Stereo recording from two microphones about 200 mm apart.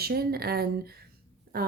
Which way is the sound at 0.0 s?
50° right (ahead or behind).